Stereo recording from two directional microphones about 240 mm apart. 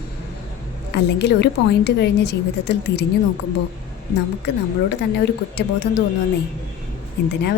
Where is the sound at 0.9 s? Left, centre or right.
Left.